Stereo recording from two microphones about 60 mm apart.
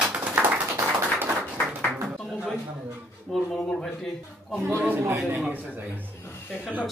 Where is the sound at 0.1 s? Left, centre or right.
Right.